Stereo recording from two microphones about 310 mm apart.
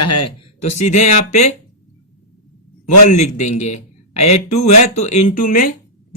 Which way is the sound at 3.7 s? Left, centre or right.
Left.